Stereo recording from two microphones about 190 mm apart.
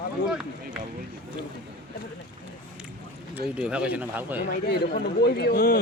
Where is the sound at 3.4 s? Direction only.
5° right (ahead or behind).